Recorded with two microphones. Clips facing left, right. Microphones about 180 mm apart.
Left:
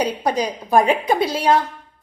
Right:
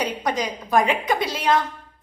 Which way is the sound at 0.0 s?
30° left (ahead or behind).